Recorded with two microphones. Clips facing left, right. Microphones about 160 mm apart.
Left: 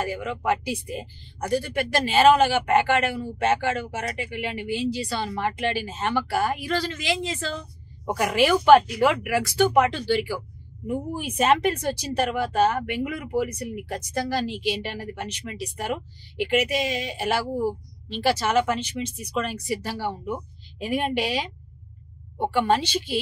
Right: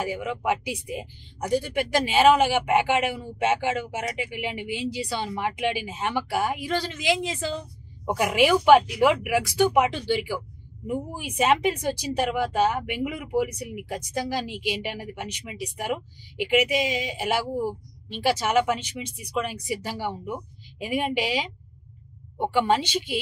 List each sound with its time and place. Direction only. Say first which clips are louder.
0.0 s speech: even; 15° right (ahead or behind)